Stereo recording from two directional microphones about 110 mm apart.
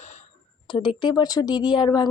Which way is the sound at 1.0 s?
40° left (ahead or behind).